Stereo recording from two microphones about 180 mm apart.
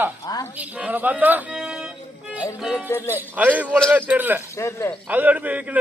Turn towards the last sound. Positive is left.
turn(degrees=-10)  # may be behind; listen again after turning